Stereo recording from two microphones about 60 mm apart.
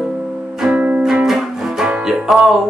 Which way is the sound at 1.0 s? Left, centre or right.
Centre.